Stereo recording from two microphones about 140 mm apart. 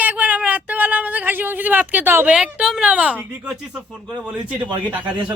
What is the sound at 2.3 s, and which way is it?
A man's voice, 5° right (ahead or behind).